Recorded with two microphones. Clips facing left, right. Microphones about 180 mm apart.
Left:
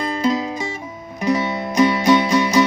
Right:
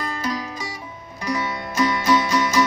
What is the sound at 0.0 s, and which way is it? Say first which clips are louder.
Music: left 7 dB; 20° left (ahead or behind).